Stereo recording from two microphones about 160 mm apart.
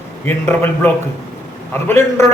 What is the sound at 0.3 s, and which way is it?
Speech, 10° left (ahead or behind).